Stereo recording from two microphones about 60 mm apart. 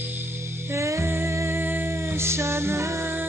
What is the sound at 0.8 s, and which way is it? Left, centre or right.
Music, right.